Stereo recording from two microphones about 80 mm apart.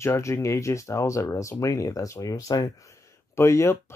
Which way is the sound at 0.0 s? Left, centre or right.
Left.